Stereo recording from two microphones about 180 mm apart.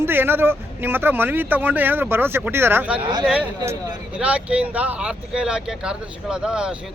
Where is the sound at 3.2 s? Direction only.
5° right (ahead or behind).